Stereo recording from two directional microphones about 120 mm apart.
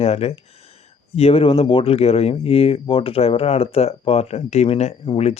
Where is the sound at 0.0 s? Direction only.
55° left (ahead or behind).